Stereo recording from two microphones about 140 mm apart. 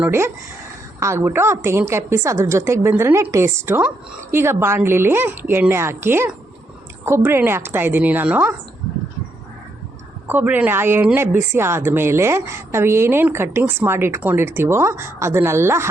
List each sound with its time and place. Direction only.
0.0 s a woman's voice: 15° right (ahead or behind)
10.2 s a woman's voice: 15° right (ahead or behind)